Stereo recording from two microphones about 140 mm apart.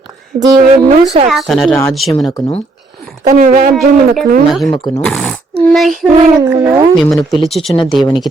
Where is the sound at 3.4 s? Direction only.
90° right.